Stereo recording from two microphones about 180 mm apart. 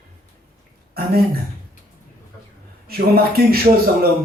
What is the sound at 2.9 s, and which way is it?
Speech, 55° right (ahead or behind).